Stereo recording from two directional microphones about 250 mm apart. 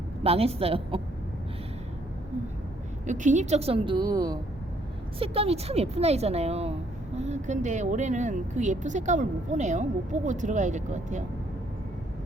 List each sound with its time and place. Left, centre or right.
0.2 s speech: right
3.1 s speech: right